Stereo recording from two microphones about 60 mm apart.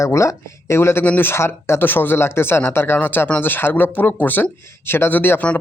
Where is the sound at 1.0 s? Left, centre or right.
Left.